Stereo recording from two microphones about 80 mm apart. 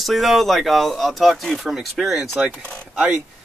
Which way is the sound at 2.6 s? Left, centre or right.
Centre.